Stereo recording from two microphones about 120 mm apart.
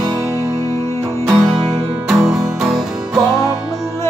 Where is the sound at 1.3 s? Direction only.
5° right (ahead or behind).